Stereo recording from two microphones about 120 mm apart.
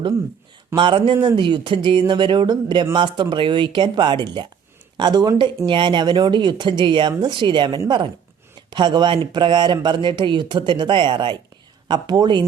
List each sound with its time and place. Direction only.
0.8 s speech: 45° right (ahead or behind)